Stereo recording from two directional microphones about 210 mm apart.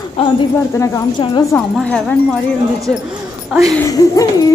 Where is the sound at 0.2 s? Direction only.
30° left (ahead or behind).